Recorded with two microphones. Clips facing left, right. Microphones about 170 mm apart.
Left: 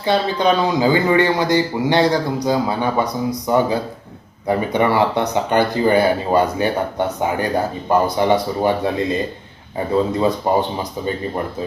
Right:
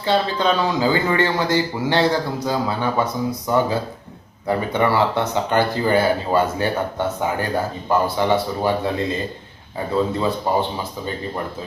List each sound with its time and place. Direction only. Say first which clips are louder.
0.0 s speech: left 2 dB; 15° left (ahead or behind)
10.2 s speech: left 3 dB; 15° left (ahead or behind)